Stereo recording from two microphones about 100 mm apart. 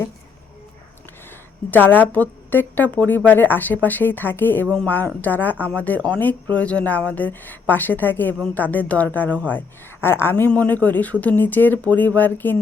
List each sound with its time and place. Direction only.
1.7 s a woman's voice: 20° left (ahead or behind)